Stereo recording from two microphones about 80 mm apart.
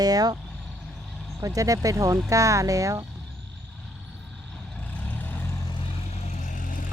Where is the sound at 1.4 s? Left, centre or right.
Right.